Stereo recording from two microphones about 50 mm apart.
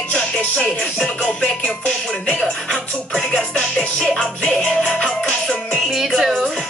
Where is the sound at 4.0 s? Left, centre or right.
Centre.